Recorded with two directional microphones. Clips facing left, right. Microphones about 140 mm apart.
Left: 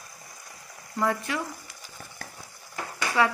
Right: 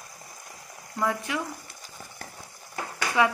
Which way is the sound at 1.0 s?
15° right (ahead or behind).